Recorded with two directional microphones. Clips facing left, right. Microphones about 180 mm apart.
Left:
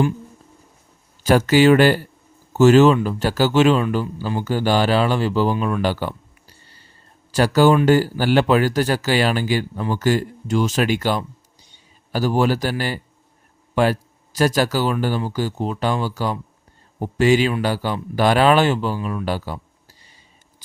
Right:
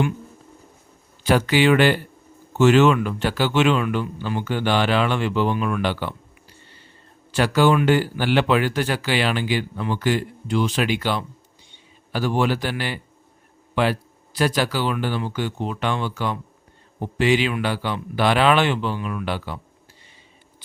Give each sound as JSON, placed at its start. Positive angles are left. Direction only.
{"t": 1.2, "sound": "a man's voice", "side_deg": 45}